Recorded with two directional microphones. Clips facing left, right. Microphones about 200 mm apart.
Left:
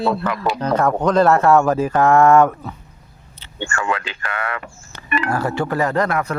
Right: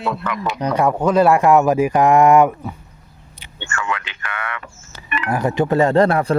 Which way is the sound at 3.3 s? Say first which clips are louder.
Left 8 dB; 15° right (ahead or behind).